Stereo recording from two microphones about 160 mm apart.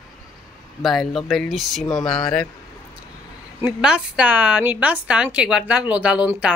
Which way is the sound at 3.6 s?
5° right (ahead or behind).